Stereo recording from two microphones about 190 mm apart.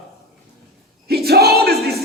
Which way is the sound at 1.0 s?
55° right (ahead or behind).